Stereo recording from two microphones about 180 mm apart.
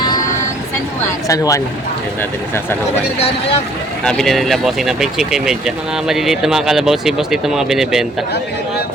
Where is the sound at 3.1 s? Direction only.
35° left (ahead or behind).